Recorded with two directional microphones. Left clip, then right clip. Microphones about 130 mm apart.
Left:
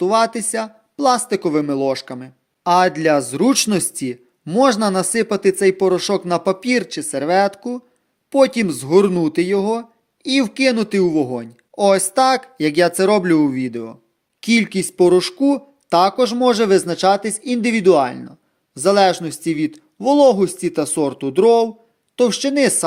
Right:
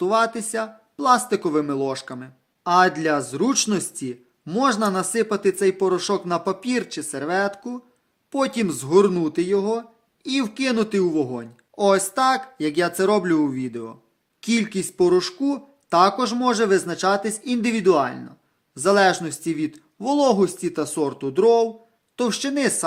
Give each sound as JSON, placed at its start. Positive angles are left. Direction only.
{"t": 0.0, "sound": "speech", "side_deg": 30}